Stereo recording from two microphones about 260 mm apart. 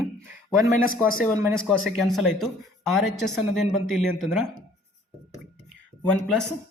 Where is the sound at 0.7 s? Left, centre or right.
Left.